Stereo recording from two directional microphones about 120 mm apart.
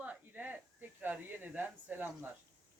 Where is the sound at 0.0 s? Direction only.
15° right (ahead or behind).